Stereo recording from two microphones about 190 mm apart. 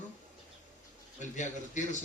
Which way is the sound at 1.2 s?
40° left (ahead or behind).